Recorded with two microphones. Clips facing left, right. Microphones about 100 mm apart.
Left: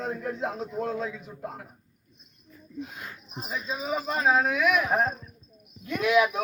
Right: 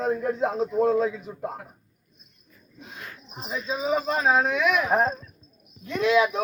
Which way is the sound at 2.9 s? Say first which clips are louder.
Left 1 dB; 10° left (ahead or behind).